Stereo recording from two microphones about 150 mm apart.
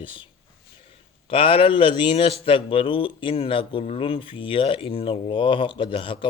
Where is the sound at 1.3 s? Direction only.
35° left (ahead or behind).